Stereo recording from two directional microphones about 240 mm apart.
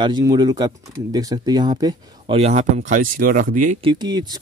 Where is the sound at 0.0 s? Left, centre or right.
Centre; by 3.7 s right.